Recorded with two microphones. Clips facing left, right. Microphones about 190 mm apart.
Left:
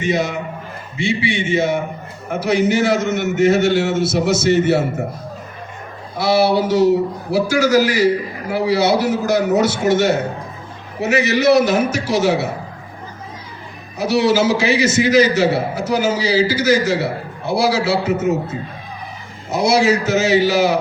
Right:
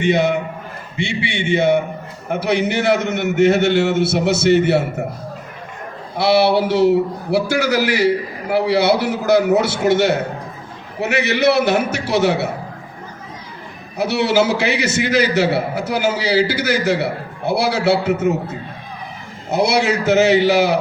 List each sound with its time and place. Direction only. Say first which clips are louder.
0.0 s a man's voice: right 3 dB; 60° right (ahead or behind)
6.1 s a man's voice: right 1 dB; 60° right (ahead or behind)
14.0 s a man's voice: left 1 dB; 60° right (ahead or behind)
19.5 s a man's voice: left 2 dB; 60° right (ahead or behind)